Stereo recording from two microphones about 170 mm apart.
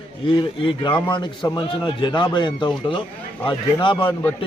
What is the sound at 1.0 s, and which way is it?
A man's voice, 25° left (ahead or behind).